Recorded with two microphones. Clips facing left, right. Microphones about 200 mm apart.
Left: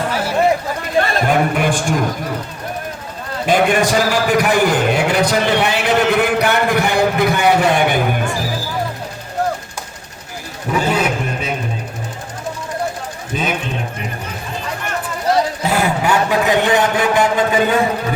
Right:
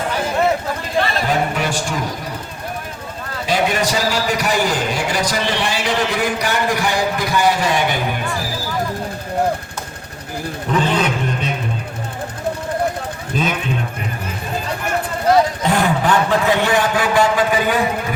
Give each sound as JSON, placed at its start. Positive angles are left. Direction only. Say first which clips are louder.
{"t": 1.0, "sound": "a sound", "louder": "left 3 dB", "side_deg": 50}
{"t": 3.4, "sound": "a man's voice", "louder": "left 4 dB", "side_deg": 50}
{"t": 10.7, "sound": "a man's voice", "louder": "left 1 dB", "side_deg": 10}
{"t": 13.3, "sound": "speech", "louder": "right 1 dB", "side_deg": 0}
{"t": 15.6, "sound": "a man's voice", "louder": "even", "side_deg": 10}